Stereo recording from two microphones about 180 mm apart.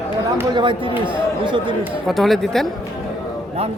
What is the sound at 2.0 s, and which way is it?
Speech, centre (ahead or behind).